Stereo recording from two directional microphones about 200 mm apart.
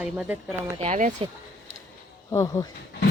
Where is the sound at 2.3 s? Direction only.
15° left (ahead or behind).